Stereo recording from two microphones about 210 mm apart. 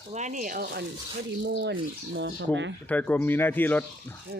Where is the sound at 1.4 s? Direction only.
55° right (ahead or behind).